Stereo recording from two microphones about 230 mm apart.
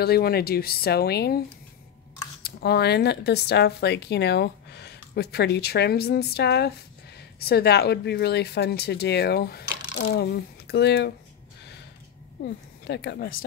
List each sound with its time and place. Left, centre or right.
0.0 s speech: left
2.4 s speech: left
12.4 s speech: left